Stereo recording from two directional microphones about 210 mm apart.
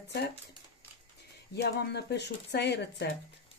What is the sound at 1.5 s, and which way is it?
Speech, 55° left (ahead or behind).